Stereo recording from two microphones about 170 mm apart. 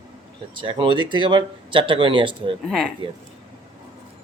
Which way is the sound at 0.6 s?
30° right (ahead or behind).